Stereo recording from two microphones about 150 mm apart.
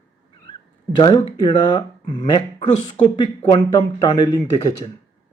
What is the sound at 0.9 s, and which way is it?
Speech, 30° left (ahead or behind).